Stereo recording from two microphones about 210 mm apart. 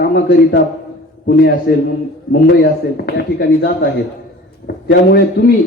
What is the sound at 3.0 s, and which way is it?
Speech, 50° left (ahead or behind).